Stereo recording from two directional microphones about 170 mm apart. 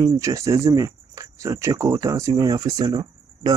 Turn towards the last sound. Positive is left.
turn(degrees=-25)  # may be behind; listen again after turning